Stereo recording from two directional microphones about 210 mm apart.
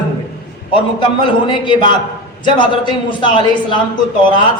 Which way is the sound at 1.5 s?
20° left (ahead or behind).